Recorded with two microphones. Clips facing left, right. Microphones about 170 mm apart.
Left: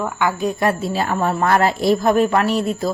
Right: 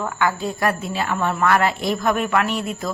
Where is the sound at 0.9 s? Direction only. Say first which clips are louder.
Left 3 dB; 40° left (ahead or behind).